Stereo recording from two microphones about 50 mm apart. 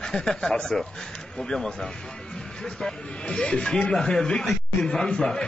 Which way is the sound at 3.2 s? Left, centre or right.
Left.